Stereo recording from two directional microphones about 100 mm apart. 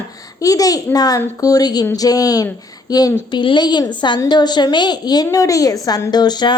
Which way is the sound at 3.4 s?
50° left (ahead or behind).